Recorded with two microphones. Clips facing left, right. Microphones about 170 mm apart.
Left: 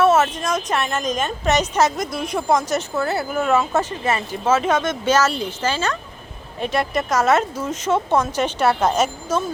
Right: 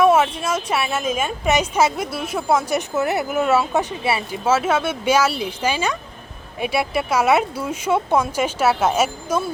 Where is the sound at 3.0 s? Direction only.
20° right (ahead or behind).